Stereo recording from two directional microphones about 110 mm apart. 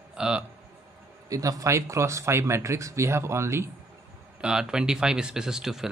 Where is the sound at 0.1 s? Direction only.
10° right (ahead or behind).